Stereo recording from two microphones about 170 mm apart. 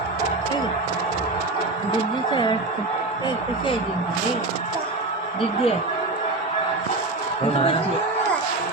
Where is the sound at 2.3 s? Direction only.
25° left (ahead or behind).